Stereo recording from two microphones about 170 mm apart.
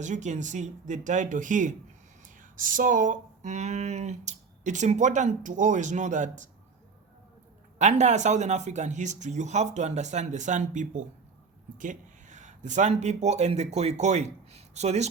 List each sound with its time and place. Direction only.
0.0 s speech: 45° right (ahead or behind)
7.8 s speech: 45° right (ahead or behind)